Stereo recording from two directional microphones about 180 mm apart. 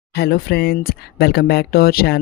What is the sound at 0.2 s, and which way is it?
Speech, 60° left (ahead or behind).